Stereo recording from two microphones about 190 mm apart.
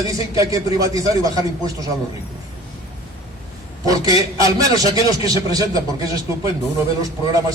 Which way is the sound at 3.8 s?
20° right (ahead or behind).